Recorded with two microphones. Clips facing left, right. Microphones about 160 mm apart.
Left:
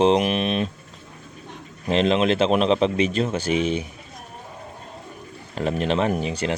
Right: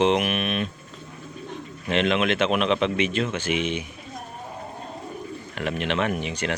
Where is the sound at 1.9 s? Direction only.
35° left (ahead or behind).